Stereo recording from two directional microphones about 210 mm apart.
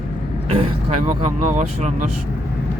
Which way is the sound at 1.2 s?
35° right (ahead or behind).